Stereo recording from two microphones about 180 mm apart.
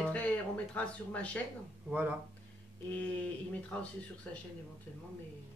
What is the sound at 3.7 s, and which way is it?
Speech, 5° left (ahead or behind).